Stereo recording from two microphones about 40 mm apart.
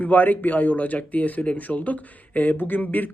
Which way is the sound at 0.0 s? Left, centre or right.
Left.